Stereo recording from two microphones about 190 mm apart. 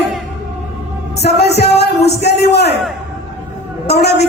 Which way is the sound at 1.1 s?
60° left (ahead or behind).